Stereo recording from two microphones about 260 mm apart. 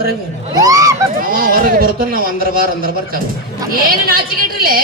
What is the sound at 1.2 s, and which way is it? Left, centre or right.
Speech, right.